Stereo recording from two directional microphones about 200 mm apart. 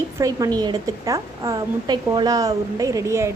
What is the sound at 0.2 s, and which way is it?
A woman's voice, 15° right (ahead or behind).